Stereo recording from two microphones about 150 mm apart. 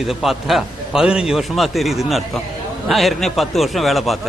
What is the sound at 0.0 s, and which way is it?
A man's voice, centre (ahead or behind).